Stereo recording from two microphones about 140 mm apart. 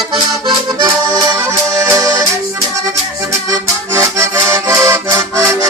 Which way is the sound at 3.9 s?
20° right (ahead or behind).